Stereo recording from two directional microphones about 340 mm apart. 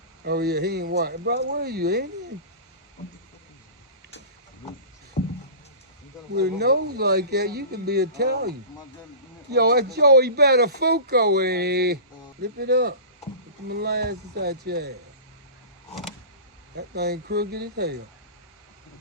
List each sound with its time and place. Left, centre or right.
0.3 s speech: right
5.2 s a sound: left
6.3 s speech: right
16.7 s speech: right